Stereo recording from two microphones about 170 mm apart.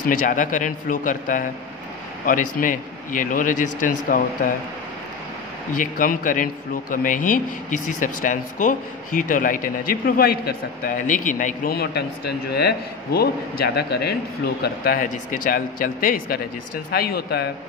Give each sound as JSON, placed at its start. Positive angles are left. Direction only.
{"t": 0.2, "sound": "a man's voice", "side_deg": 50}
{"t": 5.7, "sound": "a man's voice", "side_deg": 55}